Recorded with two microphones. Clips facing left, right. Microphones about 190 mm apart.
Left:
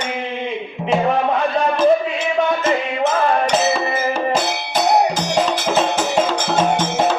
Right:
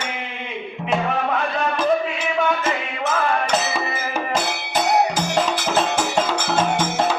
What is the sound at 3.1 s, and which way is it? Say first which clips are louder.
Music: left 2 dB; 35° left (ahead or behind).